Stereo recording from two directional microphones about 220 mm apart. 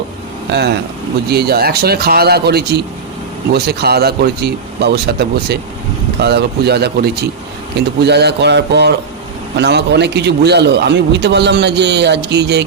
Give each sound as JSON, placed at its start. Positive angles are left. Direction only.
{"t": 1.3, "sound": "a man's voice", "side_deg": -45}